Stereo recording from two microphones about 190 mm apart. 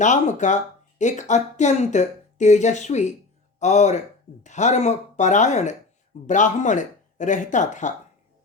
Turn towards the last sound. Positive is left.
turn(degrees=40)  # may be behind; listen again after turning